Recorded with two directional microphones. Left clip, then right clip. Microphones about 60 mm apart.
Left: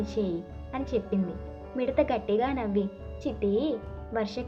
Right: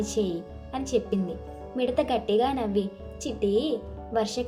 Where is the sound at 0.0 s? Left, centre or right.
Right.